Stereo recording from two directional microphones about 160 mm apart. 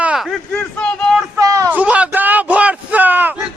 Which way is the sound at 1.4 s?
20° right (ahead or behind).